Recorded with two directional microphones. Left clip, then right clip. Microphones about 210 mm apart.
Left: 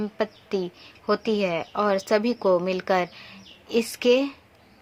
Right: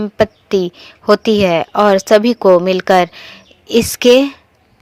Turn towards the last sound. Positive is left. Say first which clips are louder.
# right 12 dB
turn(degrees=-40)  # may be behind; listen again after turning